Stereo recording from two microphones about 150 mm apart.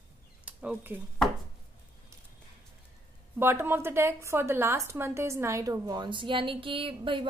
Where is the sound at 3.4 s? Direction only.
15° right (ahead or behind).